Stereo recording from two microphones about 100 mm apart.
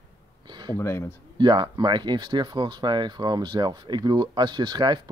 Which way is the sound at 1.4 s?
50° right (ahead or behind).